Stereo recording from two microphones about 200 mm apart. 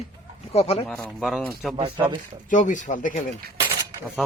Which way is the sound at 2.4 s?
40° left (ahead or behind).